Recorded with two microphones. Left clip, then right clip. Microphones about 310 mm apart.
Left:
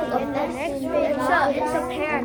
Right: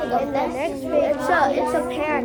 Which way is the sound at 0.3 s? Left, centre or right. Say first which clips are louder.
Right 2 dB; right.